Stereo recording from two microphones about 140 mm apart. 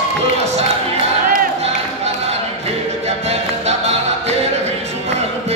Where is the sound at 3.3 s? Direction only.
50° right (ahead or behind).